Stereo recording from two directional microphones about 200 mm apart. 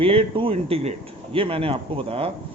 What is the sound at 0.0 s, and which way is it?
A man's voice, 30° right (ahead or behind).